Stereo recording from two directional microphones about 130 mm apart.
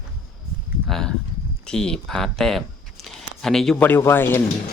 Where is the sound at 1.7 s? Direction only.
5° left (ahead or behind).